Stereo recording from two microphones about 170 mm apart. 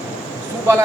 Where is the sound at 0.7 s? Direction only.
15° right (ahead or behind).